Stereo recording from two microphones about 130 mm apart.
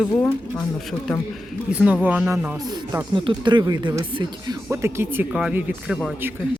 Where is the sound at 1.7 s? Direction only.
10° right (ahead or behind).